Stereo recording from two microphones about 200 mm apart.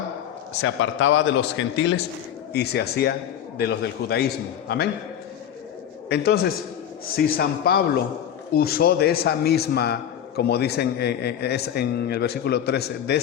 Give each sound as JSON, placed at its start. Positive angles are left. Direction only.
{"t": 0.6, "sound": "speech", "side_deg": 80}
{"t": 2.5, "sound": "speech", "side_deg": 55}
{"t": 6.1, "sound": "a man's voice", "side_deg": 50}